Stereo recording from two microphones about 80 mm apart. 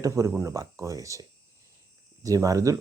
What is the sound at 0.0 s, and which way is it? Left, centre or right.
Speech, right.